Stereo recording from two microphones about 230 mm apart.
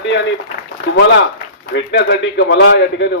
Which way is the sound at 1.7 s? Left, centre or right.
Left.